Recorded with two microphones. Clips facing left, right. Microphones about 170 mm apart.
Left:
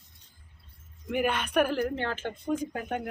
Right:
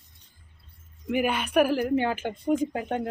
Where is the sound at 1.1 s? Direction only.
5° right (ahead or behind).